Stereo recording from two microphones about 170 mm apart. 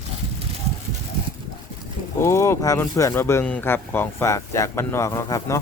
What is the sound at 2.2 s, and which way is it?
Speech, 15° left (ahead or behind).